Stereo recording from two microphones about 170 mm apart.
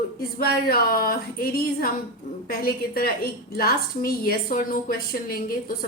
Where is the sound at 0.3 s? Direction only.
60° left (ahead or behind).